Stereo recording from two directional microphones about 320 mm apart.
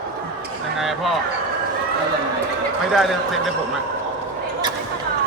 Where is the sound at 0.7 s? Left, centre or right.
Centre.